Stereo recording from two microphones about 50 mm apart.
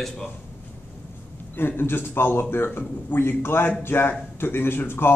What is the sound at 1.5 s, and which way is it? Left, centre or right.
A man's voice, left.